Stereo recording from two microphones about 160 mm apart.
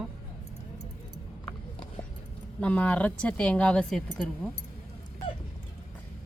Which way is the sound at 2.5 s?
10° left (ahead or behind).